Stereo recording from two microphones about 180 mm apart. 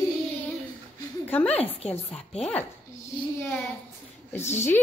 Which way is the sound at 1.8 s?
10° left (ahead or behind).